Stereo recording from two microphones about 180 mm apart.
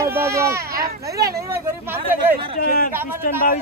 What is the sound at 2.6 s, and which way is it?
Speech, 55° left (ahead or behind).